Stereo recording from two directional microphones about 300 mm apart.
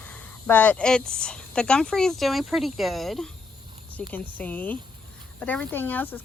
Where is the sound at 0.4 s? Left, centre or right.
Centre.